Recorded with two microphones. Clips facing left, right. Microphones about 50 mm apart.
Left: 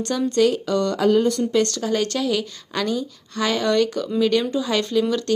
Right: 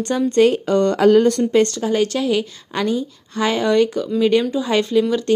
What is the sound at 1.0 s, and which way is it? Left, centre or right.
Speech, right.